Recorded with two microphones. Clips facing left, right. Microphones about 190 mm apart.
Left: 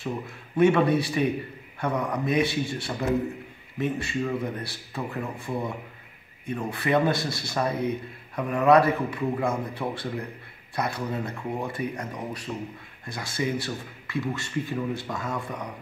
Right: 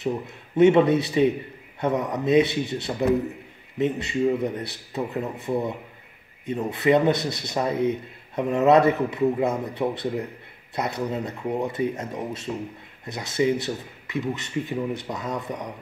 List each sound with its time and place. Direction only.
0.6 s speech: 20° right (ahead or behind)